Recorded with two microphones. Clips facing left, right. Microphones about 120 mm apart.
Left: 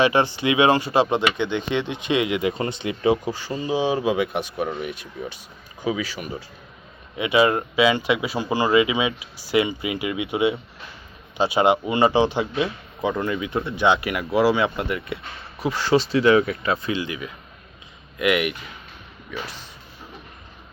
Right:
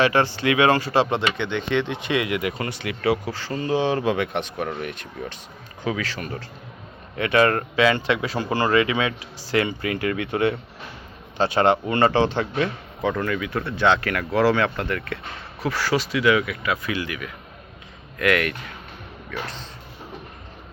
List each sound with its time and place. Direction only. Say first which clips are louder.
0.0 s speech: left 1 dB; 15° left (ahead or behind)